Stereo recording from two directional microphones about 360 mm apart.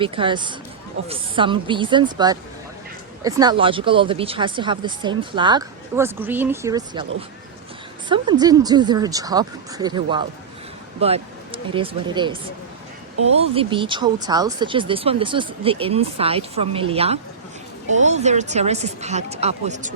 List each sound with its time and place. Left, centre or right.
0.0 s speech: centre
8.1 s speech: centre
13.4 s speech: centre